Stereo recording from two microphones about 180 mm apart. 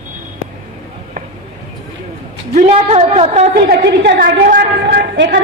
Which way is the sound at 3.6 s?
60° right (ahead or behind).